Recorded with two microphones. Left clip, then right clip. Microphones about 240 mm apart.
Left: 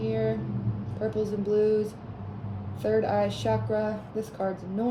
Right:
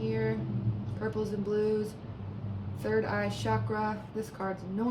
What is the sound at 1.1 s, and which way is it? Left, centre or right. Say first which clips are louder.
A woman's voice: left 5 dB; centre.